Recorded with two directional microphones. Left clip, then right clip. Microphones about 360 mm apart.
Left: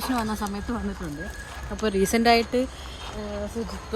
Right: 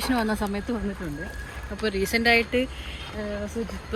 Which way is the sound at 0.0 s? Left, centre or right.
Centre.